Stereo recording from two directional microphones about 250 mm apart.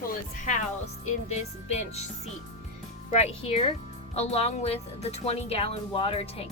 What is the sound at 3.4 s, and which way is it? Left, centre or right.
A woman's voice, left.